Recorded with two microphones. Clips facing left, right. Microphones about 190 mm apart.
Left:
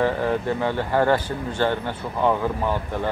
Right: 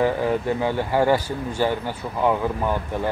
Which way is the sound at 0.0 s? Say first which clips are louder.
Right 1 dB; 15° right (ahead or behind).